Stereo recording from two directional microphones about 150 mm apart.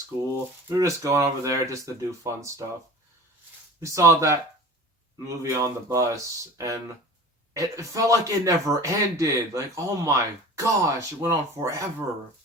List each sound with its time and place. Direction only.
0.7 s speech: 20° right (ahead or behind)
3.8 s speech: 20° right (ahead or behind)